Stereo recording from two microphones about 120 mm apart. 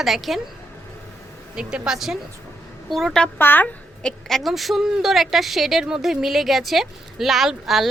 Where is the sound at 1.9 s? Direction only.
Centre (ahead or behind).